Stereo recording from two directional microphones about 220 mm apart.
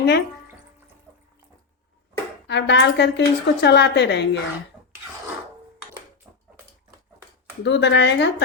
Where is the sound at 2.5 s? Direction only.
50° left (ahead or behind).